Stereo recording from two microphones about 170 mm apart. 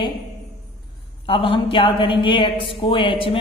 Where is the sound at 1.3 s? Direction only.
30° left (ahead or behind).